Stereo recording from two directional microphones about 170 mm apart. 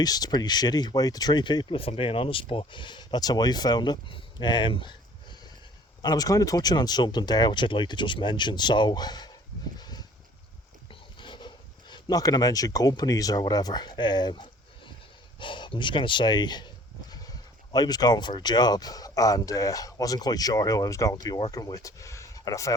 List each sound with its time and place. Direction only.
0.0 s speech: 25° left (ahead or behind)
9.7 s a sound: 25° left (ahead or behind)
11.2 s speech: 30° left (ahead or behind)